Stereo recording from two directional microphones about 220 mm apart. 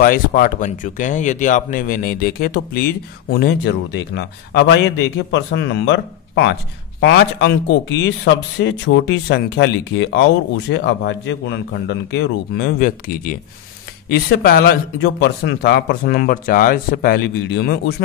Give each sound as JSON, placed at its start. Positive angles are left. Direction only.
{"t": 0.0, "sound": "speech", "side_deg": 40}
{"t": 8.5, "sound": "speech", "side_deg": 55}